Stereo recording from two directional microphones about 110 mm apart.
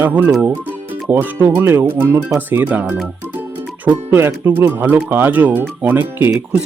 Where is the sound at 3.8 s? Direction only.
20° right (ahead or behind).